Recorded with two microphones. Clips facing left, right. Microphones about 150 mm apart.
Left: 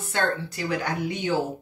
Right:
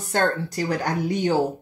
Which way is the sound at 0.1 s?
40° right (ahead or behind).